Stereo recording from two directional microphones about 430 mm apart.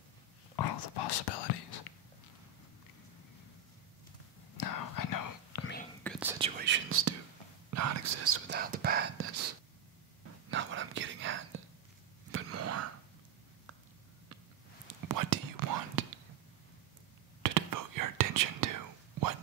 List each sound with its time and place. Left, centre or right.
0.6 s whispering: left
4.6 s whispering: left
6.0 s whispering: centre
6.6 s whispering: right
10.5 s whispering: right
15.0 s whispering: right
17.4 s whispering: right